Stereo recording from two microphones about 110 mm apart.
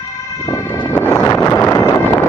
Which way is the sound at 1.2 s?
25° left (ahead or behind).